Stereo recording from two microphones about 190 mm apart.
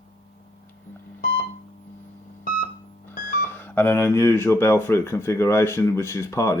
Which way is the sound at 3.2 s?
10° left (ahead or behind).